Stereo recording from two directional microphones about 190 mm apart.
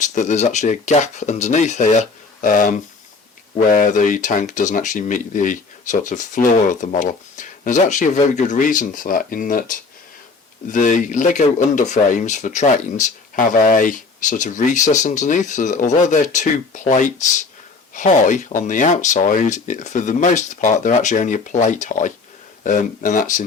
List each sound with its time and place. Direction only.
0.1 s speech: 40° left (ahead or behind)